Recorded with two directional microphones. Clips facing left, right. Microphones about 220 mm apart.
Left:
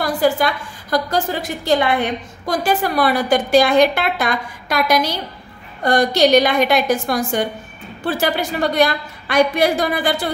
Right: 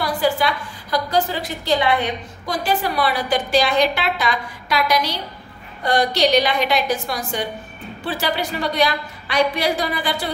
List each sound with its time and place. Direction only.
0.0 s a woman's voice: 50° left (ahead or behind)